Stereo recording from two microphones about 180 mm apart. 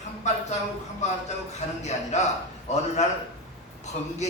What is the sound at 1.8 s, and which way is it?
A man's voice, 40° left (ahead or behind).